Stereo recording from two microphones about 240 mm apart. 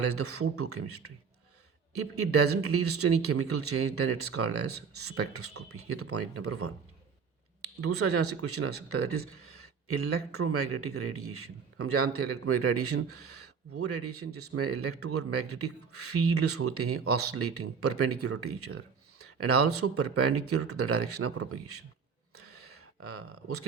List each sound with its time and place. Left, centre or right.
0.1 s a man's voice: right
7.8 s a man's voice: right
22.4 s a sound: right